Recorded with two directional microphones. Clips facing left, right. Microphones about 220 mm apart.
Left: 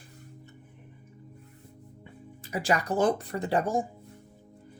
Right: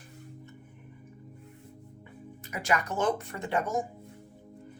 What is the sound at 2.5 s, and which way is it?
Speech, 30° left (ahead or behind).